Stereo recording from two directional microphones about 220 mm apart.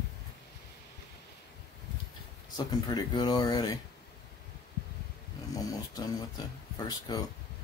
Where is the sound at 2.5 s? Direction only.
20° left (ahead or behind).